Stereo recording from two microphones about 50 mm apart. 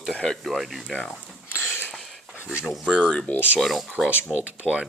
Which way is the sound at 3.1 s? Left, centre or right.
Left.